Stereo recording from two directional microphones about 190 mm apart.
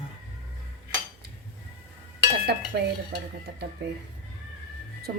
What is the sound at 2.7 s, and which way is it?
Speech, 60° right (ahead or behind).